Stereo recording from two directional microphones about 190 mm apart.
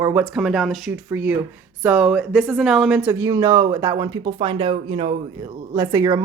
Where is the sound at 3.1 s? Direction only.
15° right (ahead or behind).